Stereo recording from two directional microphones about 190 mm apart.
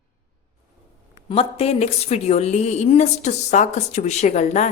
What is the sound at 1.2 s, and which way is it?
A woman's voice, 30° left (ahead or behind).